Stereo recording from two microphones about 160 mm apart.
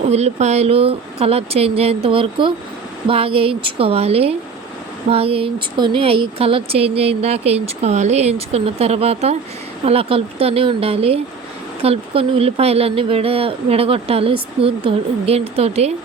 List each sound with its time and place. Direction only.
0.1 s speech: 45° right (ahead or behind)